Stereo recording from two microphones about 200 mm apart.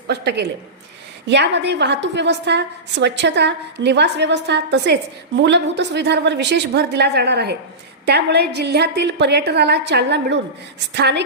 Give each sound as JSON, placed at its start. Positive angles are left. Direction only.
{"t": 0.1, "sound": "a woman's voice", "side_deg": -55}